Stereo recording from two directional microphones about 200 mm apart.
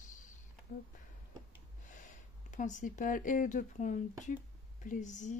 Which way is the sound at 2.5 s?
40° left (ahead or behind).